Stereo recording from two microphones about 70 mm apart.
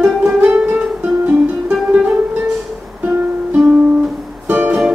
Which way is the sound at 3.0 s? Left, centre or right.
Centre.